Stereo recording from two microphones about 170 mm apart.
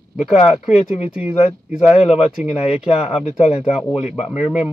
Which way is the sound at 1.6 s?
40° left (ahead or behind).